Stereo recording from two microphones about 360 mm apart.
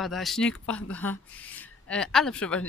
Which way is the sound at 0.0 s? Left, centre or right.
Centre.